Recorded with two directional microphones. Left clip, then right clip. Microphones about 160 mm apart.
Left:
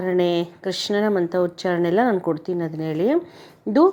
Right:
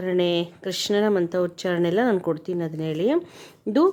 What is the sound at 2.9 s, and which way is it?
Speech, 45° right (ahead or behind).